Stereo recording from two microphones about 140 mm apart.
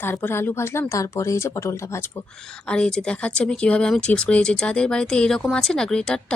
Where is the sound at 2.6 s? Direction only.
5° left (ahead or behind).